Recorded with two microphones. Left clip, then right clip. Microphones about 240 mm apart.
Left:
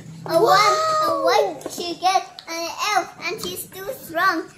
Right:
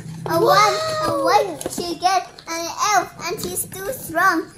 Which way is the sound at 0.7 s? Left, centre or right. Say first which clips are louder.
Left 2 dB; centre.